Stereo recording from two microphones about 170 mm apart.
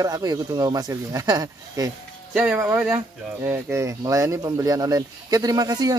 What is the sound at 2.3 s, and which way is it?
Speech, 10° right (ahead or behind).